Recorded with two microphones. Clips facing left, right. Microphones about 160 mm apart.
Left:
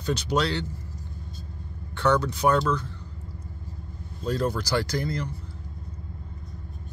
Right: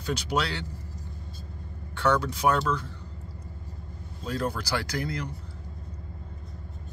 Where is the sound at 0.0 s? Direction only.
10° right (ahead or behind).